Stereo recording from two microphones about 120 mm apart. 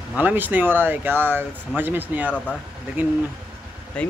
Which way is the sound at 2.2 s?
10° left (ahead or behind).